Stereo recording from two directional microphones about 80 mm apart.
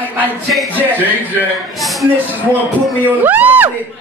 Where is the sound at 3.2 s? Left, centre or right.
Right.